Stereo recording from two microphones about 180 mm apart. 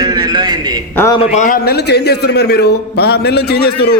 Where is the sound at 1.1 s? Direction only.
45° left (ahead or behind); by 3.9 s 60° left (ahead or behind).